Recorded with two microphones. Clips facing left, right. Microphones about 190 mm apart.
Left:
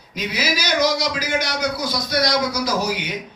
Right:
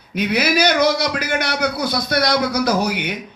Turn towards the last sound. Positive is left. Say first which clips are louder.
# right 3 dB
turn(degrees=-60)  # may be behind; listen again after turning